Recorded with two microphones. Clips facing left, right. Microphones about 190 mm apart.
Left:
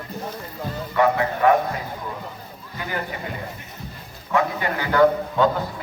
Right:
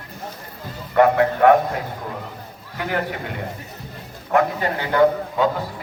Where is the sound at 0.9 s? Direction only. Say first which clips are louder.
Right 5 dB; 55° right (ahead or behind).